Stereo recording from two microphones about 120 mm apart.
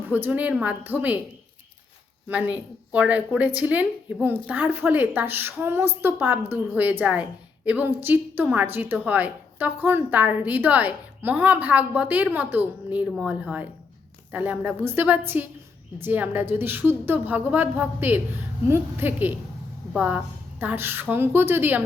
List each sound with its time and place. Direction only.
0.0 s a woman's voice: 15° right (ahead or behind)
2.3 s a woman's voice: 10° right (ahead or behind)